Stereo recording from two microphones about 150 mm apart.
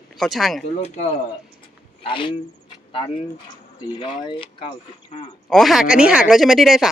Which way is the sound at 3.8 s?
30° left (ahead or behind).